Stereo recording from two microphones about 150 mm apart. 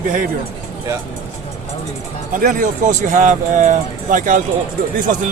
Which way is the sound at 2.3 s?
65° right (ahead or behind).